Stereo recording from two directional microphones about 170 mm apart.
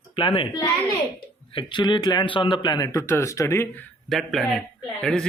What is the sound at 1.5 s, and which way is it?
Speech, 30° left (ahead or behind).